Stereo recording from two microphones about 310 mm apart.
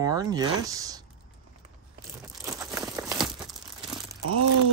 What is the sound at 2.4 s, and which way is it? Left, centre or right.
Crumpling, centre.